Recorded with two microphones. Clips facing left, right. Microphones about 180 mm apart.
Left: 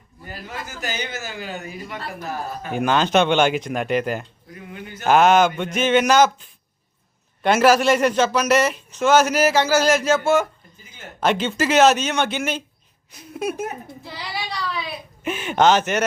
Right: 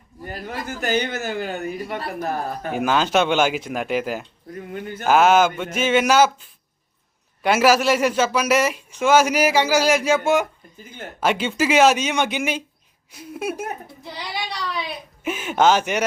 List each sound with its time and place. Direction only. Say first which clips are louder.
0.3 s a man's voice: right 4 dB; 55° right (ahead or behind)
2.7 s a man's voice: left 1 dB; 5° right (ahead or behind)
4.5 s speech: right 6 dB; 45° right (ahead or behind)
5.0 s a man's voice: left 1 dB; 5° right (ahead or behind)
15.2 s speech: even; 5° right (ahead or behind)